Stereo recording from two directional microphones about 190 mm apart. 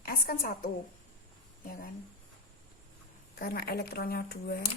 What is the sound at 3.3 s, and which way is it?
Speech, 55° left (ahead or behind).